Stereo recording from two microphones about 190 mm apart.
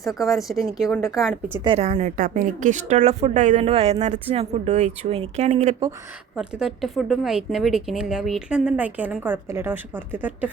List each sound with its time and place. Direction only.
0.0 s a woman's voice: centre (ahead or behind)
1.6 s a woman's voice: 30° right (ahead or behind)
6.3 s a woman's voice: 5° right (ahead or behind)